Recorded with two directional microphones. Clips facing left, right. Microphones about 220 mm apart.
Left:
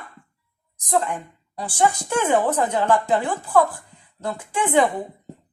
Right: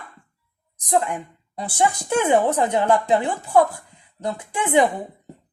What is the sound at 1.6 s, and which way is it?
A woman's voice, 20° right (ahead or behind).